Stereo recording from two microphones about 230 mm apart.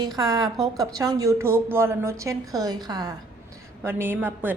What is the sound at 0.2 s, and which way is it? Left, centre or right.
A woman's voice, centre.